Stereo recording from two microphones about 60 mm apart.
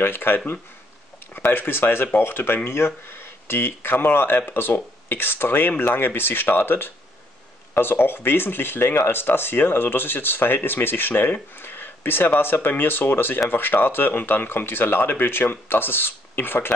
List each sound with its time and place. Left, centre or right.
0.0 s speech: left
1.5 s speech: left